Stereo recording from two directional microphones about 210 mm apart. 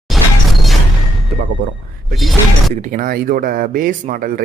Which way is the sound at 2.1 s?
Centre (ahead or behind).